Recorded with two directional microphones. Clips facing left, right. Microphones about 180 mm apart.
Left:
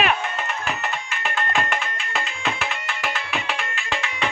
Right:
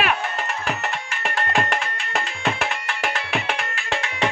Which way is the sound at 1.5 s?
35° right (ahead or behind).